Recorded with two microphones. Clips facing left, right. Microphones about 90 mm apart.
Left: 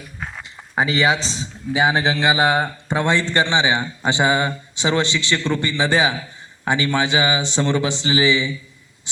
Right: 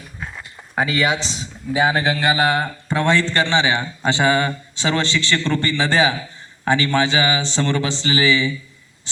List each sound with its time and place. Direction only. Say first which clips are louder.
0.8 s speech: left 1 dB; 25° left (ahead or behind)
1.7 s a man's voice: even; 20° left (ahead or behind)